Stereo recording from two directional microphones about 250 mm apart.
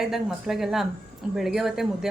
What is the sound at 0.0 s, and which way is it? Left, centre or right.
A woman's voice, centre.